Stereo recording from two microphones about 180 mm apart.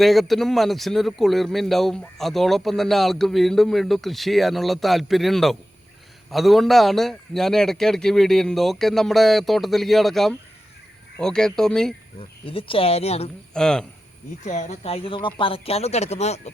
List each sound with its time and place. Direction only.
0.0 s a man's voice: centre (ahead or behind)
12.2 s speech: 30° left (ahead or behind)
13.5 s speech: 5° left (ahead or behind)
14.4 s speech: 40° left (ahead or behind)